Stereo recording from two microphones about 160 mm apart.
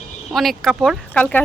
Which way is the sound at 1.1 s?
10° left (ahead or behind).